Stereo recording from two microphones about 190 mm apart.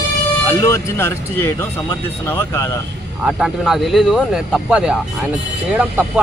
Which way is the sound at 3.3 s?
Centre (ahead or behind).